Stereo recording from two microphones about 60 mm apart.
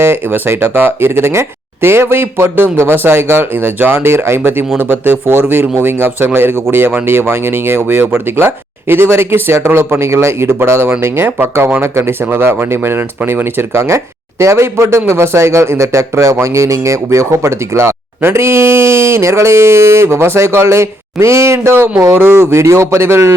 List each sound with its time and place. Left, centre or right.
0.0 s speech: right